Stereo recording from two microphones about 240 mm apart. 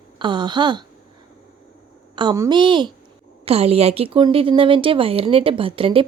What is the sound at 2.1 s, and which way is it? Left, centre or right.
A woman's voice, centre.